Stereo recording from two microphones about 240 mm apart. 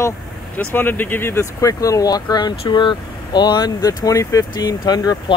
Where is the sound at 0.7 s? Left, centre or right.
Centre.